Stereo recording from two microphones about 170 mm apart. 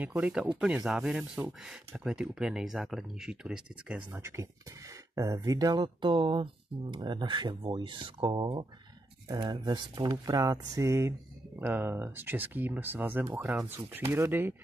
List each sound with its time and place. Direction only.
0.0 s speech: 10° right (ahead or behind)
4.2 s speech: 15° right (ahead or behind)